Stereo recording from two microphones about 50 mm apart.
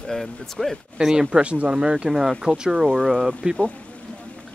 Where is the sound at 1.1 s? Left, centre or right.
Centre.